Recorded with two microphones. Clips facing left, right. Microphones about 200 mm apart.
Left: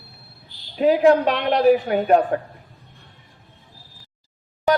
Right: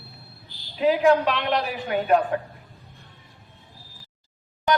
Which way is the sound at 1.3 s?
45° left (ahead or behind).